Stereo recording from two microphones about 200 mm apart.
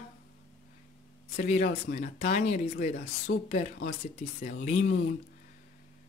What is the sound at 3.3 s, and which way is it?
Speech, 65° left (ahead or behind).